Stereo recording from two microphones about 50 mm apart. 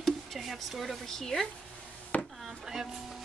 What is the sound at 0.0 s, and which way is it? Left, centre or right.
Speech, centre.